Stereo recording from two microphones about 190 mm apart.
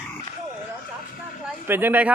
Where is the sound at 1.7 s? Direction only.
10° right (ahead or behind).